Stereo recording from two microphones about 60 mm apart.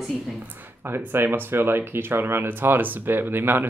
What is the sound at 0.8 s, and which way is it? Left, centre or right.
Speech, right.